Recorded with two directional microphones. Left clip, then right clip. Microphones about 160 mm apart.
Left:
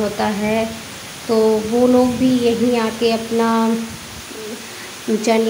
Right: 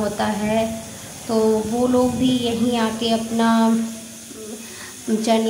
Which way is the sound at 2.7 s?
25° left (ahead or behind).